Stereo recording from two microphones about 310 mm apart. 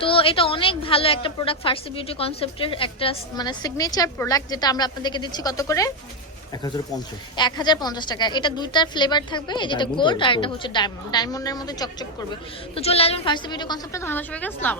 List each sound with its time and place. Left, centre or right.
0.0 s a woman's voice: centre
7.3 s a woman's voice: centre